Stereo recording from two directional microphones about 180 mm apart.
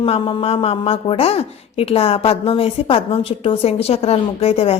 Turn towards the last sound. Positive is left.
turn(degrees=35)  # may be behind; listen again after turning